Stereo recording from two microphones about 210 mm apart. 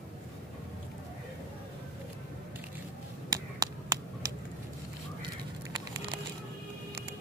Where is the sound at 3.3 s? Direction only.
20° right (ahead or behind).